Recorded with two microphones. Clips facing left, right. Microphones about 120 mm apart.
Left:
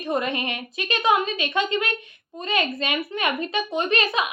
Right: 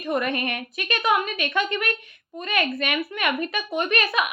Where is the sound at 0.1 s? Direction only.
20° left (ahead or behind).